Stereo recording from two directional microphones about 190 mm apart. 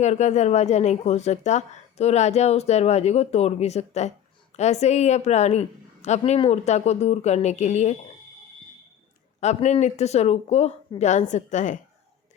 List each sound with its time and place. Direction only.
0.0 s a woman's voice: 35° left (ahead or behind)
9.4 s a woman's voice: 35° left (ahead or behind)